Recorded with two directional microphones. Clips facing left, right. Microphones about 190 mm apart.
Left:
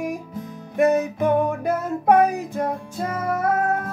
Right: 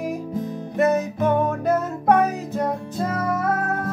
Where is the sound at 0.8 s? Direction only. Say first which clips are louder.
Left 1 dB; 15° left (ahead or behind).